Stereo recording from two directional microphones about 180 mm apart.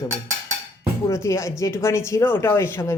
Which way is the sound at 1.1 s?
15° left (ahead or behind).